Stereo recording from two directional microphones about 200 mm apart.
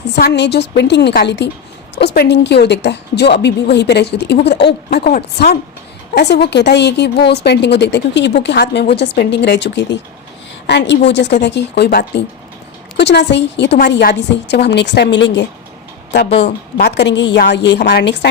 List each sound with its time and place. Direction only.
0.2 s a woman's voice: 60° left (ahead or behind)
6.1 s a woman's voice: 55° left (ahead or behind)